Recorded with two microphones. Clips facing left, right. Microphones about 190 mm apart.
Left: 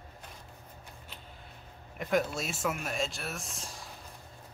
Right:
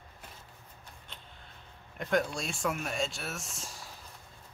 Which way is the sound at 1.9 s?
5° left (ahead or behind).